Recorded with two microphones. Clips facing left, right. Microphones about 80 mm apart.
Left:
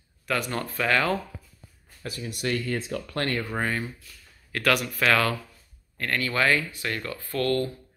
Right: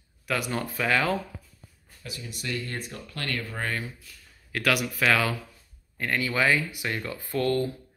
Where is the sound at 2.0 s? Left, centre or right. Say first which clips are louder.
Left 7 dB; left.